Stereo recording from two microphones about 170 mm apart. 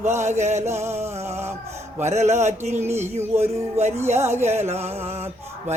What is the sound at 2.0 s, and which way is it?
Speech, 40° right (ahead or behind).